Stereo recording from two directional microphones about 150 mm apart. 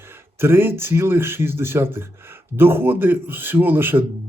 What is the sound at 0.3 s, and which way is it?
A man's voice, 15° right (ahead or behind).